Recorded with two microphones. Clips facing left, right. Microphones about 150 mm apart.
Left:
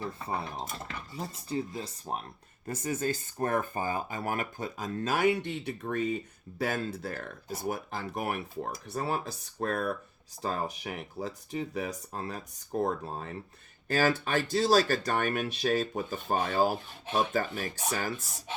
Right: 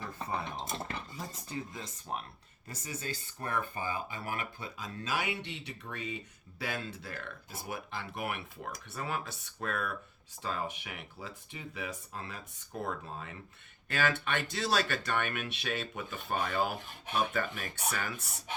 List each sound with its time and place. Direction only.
1.1 s speech: 30° left (ahead or behind)
2.6 s speech: 50° left (ahead or behind)